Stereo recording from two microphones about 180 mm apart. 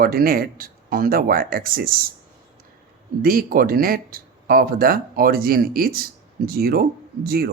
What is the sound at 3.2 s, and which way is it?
Speech, 55° right (ahead or behind).